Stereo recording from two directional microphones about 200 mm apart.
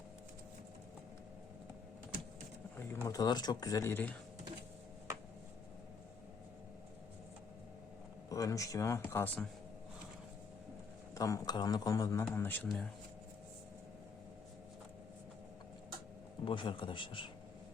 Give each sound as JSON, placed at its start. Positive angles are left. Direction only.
{"t": 3.1, "sound": "a man's voice", "side_deg": 20}
{"t": 8.3, "sound": "a man's voice", "side_deg": 15}
{"t": 11.1, "sound": "a man's voice", "side_deg": 15}
{"t": 16.4, "sound": "a man's voice", "side_deg": 25}